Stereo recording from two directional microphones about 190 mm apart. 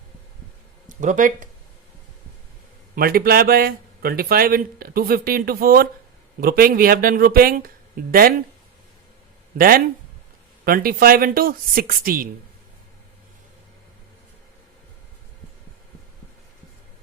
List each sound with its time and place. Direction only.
0.9 s speech: 45° right (ahead or behind)
2.9 s speech: 50° right (ahead or behind)
9.6 s speech: 50° right (ahead or behind)